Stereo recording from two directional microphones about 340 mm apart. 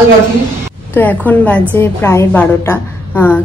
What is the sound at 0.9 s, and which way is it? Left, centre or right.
A woman's voice, centre.